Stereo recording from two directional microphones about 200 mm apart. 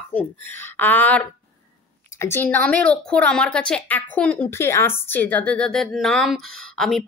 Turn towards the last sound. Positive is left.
turn(degrees=0)  # may be behind; listen again after turning